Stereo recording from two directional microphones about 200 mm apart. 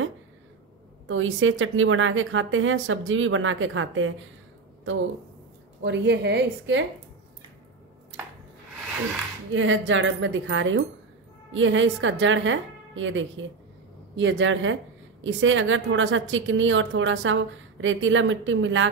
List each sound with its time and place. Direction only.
1.0 s a woman's voice: 75° right (ahead or behind)
5.9 s a woman's voice: 60° right (ahead or behind)
9.5 s a woman's voice: 70° right (ahead or behind)